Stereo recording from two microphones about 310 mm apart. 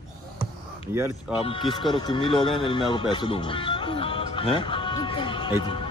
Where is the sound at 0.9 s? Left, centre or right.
Centre.